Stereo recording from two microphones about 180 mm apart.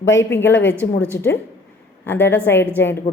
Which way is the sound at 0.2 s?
10° left (ahead or behind).